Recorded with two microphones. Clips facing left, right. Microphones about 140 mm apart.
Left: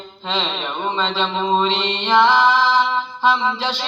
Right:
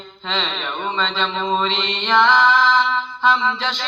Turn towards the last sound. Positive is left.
turn(degrees=10)  # may be behind; listen again after turning